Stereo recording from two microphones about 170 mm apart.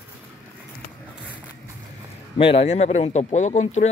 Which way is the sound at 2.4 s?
35° left (ahead or behind).